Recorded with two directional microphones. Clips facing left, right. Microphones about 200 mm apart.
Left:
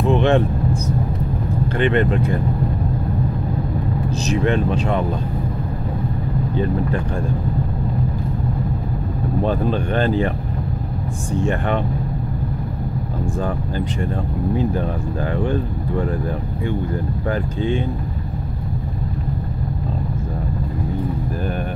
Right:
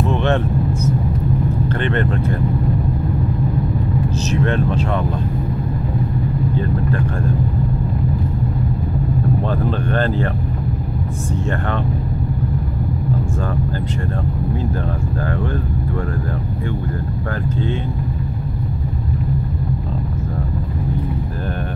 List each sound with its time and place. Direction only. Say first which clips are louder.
0.1 s vehicle: left 5 dB; 15° left (ahead or behind)
1.7 s speech: left 6 dB; 15° left (ahead or behind)
4.3 s speech: left 2 dB; 15° left (ahead or behind)
9.4 s speech: left 1 dB; 15° left (ahead or behind)